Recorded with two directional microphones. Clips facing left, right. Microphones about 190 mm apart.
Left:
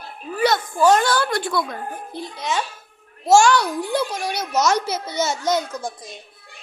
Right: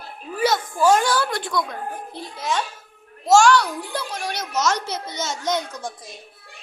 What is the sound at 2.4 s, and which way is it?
A child's voice, 5° left (ahead or behind).